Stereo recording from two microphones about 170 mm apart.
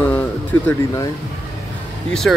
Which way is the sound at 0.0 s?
10° left (ahead or behind).